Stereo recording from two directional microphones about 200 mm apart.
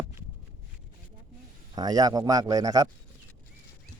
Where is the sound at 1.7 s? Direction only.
20° right (ahead or behind).